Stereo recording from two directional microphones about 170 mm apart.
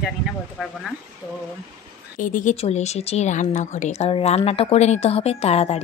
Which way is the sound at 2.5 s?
40° left (ahead or behind).